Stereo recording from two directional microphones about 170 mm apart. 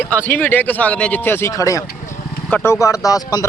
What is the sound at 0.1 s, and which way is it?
Speech, 10° left (ahead or behind).